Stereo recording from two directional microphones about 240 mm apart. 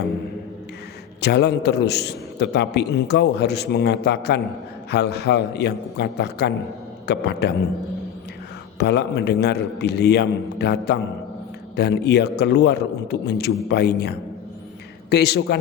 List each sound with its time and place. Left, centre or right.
1.2 s a man's voice: left
8.8 s a man's voice: left